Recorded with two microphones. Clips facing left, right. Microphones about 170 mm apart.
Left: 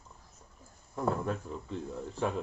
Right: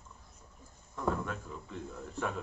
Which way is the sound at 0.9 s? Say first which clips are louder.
Left 3 dB; 35° left (ahead or behind).